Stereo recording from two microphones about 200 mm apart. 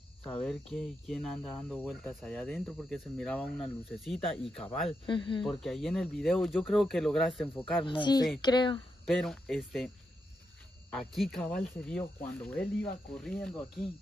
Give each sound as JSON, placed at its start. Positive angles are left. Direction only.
{"t": 0.2, "sound": "speech", "side_deg": 5}
{"t": 5.0, "sound": "speech", "side_deg": 25}
{"t": 5.6, "sound": "speech", "side_deg": 0}
{"t": 7.8, "sound": "speech", "side_deg": 25}
{"t": 9.0, "sound": "speech", "side_deg": 0}
{"t": 10.9, "sound": "speech", "side_deg": 0}